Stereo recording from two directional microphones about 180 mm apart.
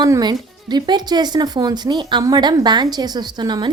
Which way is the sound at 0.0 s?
25° right (ahead or behind).